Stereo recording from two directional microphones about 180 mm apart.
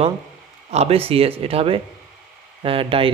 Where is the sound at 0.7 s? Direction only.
35° right (ahead or behind).